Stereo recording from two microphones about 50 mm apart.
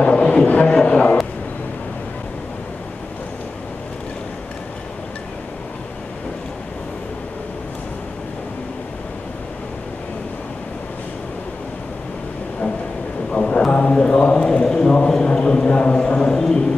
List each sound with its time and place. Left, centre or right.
0.0 s music: left
13.3 s mantra: centre
16.3 s a sound: centre